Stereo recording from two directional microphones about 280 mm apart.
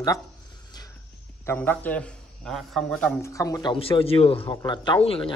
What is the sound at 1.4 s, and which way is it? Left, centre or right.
Speech, centre.